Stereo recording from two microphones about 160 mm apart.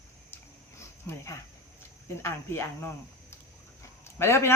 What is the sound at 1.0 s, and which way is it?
Speech, 20° left (ahead or behind).